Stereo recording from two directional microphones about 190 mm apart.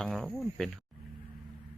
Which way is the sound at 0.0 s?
Centre (ahead or behind).